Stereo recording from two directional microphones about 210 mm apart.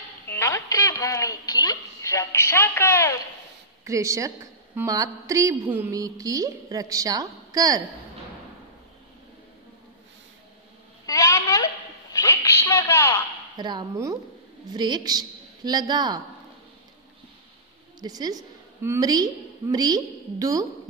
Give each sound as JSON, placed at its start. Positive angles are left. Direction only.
{"t": 0.3, "sound": "a woman's voice", "side_deg": 15}
{"t": 3.8, "sound": "a woman's voice", "side_deg": -15}
{"t": 11.1, "sound": "a sound", "side_deg": 15}
{"t": 13.6, "sound": "a woman's voice", "side_deg": -20}
{"t": 18.0, "sound": "a woman's voice", "side_deg": -20}